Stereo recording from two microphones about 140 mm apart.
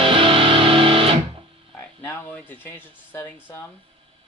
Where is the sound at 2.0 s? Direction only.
15° left (ahead or behind).